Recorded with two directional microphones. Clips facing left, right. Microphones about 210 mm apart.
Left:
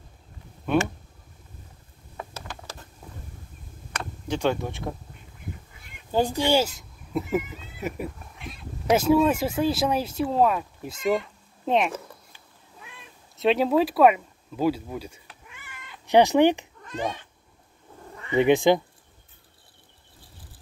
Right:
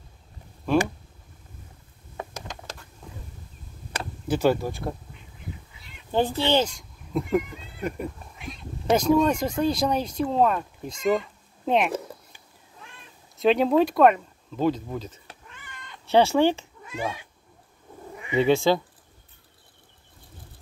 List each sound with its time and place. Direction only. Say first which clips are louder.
2.1 s a sound: right 2 dB; 15° right (ahead or behind)
3.0 s a sound: right 2 dB; 5° left (ahead or behind)
4.3 s speech: right 3 dB; 5° right (ahead or behind)
5.7 s crow: even; 50° left (ahead or behind)
6.1 s speech: even; 15° left (ahead or behind)
13.4 s a sound: right 1 dB; centre (ahead or behind)
16.2 s speech: left 2 dB; 15° left (ahead or behind)
16.8 s speech: left 1 dB; 10° right (ahead or behind)
18.1 s cat: left 1 dB; 15° right (ahead or behind)
18.4 s speech: left 2 dB; 15° left (ahead or behind)